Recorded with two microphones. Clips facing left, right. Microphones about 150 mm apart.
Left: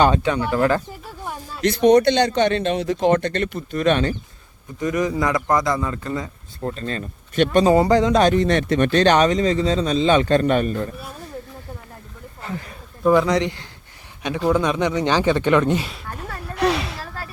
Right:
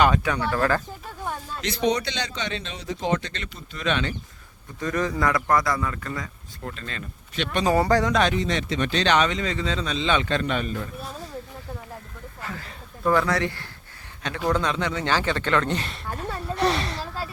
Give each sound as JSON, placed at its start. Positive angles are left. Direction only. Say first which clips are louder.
{"t": 0.0, "sound": "a man's voice", "louder": "left 3 dB", "side_deg": 25}
{"t": 0.3, "sound": "speech", "louder": "left 4 dB", "side_deg": 15}
{"t": 1.2, "sound": "a sound", "louder": "right 1 dB", "side_deg": 10}
{"t": 1.6, "sound": "a man's voice", "louder": "left 11 dB", "side_deg": 50}
{"t": 4.8, "sound": "a man's voice", "louder": "left 4 dB", "side_deg": 15}
{"t": 7.6, "sound": "a man's voice", "louder": "left 3 dB", "side_deg": 25}
{"t": 8.1, "sound": "speech", "louder": "left 6 dB", "side_deg": 40}
{"t": 8.4, "sound": "speech", "louder": "left 7 dB", "side_deg": 55}
{"t": 12.4, "sound": "speech", "louder": "left 5 dB", "side_deg": 20}
{"t": 16.0, "sound": "a sound", "louder": "right 2 dB", "side_deg": 0}